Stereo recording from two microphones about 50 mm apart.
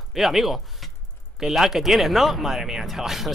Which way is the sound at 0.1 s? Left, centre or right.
Centre.